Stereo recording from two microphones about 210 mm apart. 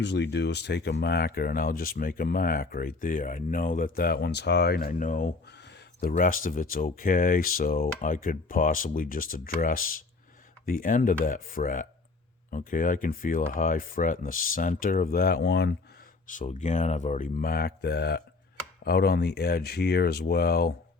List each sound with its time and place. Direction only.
0.0 s speech: 55° left (ahead or behind)
16.2 s speech: 40° left (ahead or behind)